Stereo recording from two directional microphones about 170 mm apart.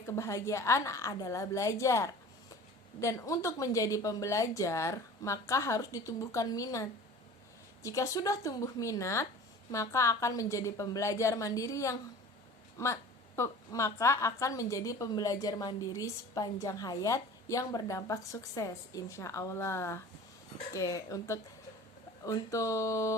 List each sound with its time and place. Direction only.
0.2 s a woman's voice: 20° left (ahead or behind)